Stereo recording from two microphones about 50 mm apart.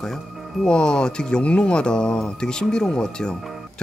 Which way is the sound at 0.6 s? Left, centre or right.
Centre.